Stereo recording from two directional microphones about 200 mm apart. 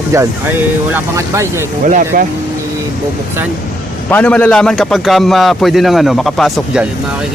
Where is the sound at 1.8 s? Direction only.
40° right (ahead or behind).